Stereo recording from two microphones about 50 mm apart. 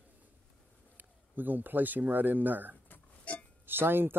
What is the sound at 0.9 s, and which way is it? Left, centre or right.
Speech, right.